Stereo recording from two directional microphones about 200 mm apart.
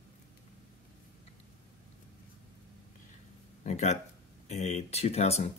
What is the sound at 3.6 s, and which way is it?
Speech, 35° left (ahead or behind).